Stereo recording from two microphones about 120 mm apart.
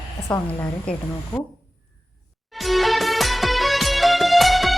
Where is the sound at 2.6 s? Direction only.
Centre (ahead or behind).